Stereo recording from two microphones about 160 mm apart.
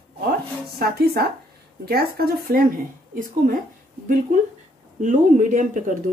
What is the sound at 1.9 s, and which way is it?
Speech, 70° right (ahead or behind).